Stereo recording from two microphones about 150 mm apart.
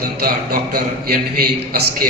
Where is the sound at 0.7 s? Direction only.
90° right.